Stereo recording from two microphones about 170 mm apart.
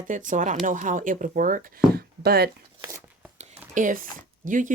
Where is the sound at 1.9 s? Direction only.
65° right (ahead or behind).